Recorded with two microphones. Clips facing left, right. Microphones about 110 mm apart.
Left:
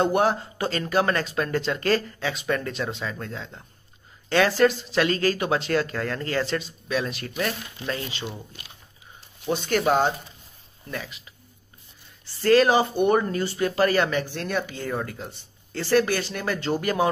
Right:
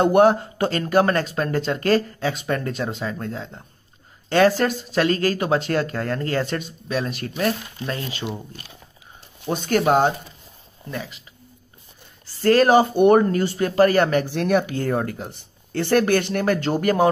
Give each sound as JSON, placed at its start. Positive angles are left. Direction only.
{"t": 0.0, "sound": "speech", "side_deg": -50}
{"t": 9.5, "sound": "speech", "side_deg": -45}
{"t": 10.9, "sound": "speech", "side_deg": -30}
{"t": 12.4, "sound": "speech", "side_deg": -45}
{"t": 14.1, "sound": "speech", "side_deg": -70}